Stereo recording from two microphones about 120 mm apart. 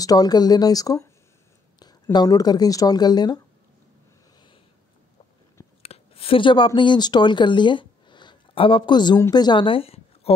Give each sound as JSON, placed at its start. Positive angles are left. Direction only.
{"t": 0.0, "sound": "speech", "side_deg": 30}
{"t": 2.1, "sound": "speech", "side_deg": 35}
{"t": 5.8, "sound": "speech", "side_deg": 55}